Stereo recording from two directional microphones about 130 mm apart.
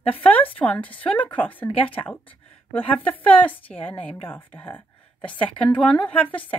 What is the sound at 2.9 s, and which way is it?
A woman's voice, 10° left (ahead or behind).